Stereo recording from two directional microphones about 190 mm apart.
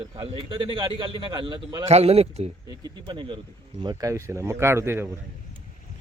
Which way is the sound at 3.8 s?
15° right (ahead or behind).